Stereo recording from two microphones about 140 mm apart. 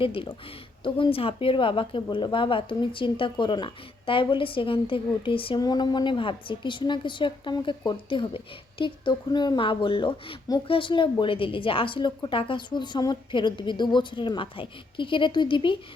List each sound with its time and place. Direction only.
0.0 s speech: 40° left (ahead or behind)
5.5 s speech: 30° left (ahead or behind)